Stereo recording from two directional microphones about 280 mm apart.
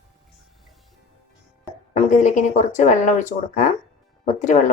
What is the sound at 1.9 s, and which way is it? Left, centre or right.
Speech, left.